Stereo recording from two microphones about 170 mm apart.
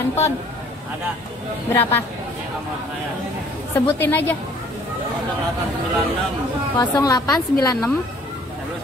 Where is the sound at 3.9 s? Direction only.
10° left (ahead or behind).